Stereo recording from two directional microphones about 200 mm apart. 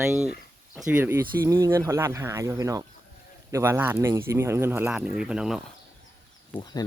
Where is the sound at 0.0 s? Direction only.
10° right (ahead or behind).